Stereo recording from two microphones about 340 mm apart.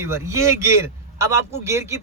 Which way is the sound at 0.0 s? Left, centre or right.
Centre.